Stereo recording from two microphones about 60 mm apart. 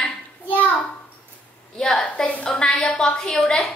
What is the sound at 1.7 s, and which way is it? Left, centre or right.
A woman's voice, centre.